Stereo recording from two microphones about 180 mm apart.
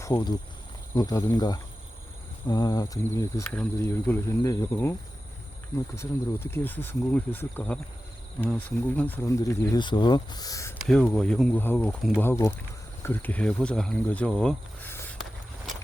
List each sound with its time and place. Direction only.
0.0 s speech: 25° left (ahead or behind)
10.8 s speech: 5° left (ahead or behind)
15.2 s walk: centre (ahead or behind)